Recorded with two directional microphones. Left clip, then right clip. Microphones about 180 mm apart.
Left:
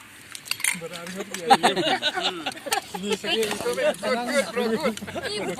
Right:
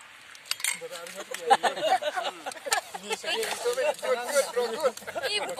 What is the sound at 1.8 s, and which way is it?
Speech, 40° right (ahead or behind).